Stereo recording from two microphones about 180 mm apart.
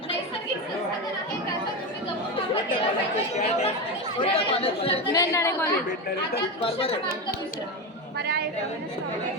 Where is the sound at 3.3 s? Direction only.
35° left (ahead or behind).